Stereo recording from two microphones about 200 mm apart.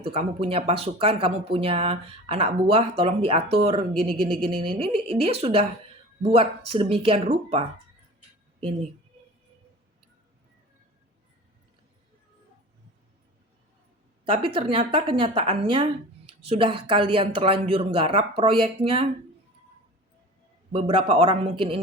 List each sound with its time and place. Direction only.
0.0 s speech: 30° right (ahead or behind)
14.3 s speech: 25° right (ahead or behind)
20.7 s speech: 25° right (ahead or behind)